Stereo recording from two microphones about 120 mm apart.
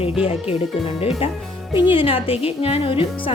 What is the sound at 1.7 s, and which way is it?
Speech, 45° left (ahead or behind).